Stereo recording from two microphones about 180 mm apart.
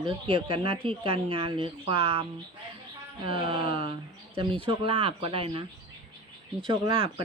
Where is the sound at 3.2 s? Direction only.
30° right (ahead or behind).